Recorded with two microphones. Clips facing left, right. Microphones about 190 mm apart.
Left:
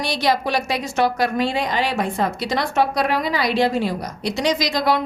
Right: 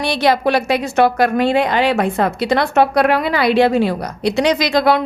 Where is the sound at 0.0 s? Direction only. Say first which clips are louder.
Right 5 dB; 60° right (ahead or behind).